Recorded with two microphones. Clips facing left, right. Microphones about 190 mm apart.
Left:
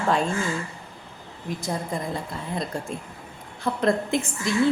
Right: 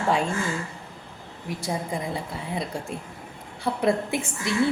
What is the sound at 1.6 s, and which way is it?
A woman's voice, 10° right (ahead or behind).